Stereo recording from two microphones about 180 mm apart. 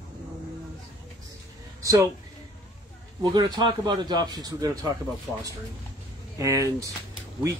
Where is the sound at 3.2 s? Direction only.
25° right (ahead or behind).